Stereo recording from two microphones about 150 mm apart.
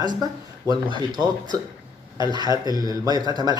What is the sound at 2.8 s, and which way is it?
Speech, 25° right (ahead or behind).